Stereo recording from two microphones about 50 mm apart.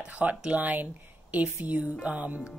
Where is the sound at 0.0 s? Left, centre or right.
Right.